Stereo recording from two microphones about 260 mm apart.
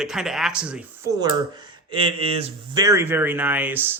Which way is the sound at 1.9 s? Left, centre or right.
Centre.